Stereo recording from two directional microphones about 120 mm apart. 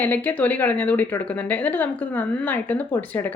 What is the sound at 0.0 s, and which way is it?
Speech, 15° left (ahead or behind).